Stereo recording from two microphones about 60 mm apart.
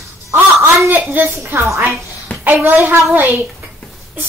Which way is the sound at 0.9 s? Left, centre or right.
Right.